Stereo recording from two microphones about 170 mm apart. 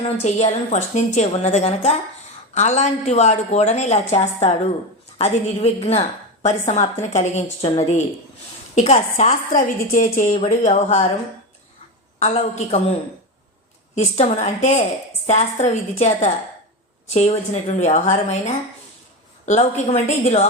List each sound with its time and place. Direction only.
0.2 s a woman's voice: 40° left (ahead or behind)
10.6 s a woman's voice: 40° left (ahead or behind)
12.2 s a woman's voice: 40° left (ahead or behind)
13.9 s a woman's voice: 40° left (ahead or behind)